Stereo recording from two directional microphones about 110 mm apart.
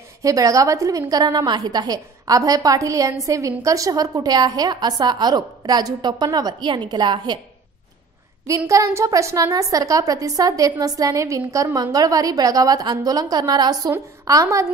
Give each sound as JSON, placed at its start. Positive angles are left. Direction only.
{"t": 0.2, "sound": "a woman's voice", "side_deg": -30}
{"t": 8.5, "sound": "a woman's voice", "side_deg": -30}